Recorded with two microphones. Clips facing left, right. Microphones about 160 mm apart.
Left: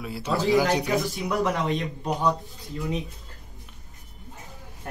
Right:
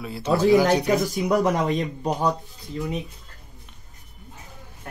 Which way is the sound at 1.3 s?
40° right (ahead or behind).